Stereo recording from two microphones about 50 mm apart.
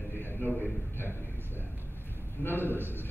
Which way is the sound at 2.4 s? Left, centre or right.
Left.